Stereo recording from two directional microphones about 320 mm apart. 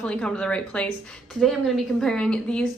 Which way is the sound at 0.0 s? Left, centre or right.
Centre.